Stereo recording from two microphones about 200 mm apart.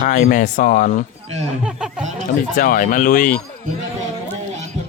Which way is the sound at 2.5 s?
45° left (ahead or behind).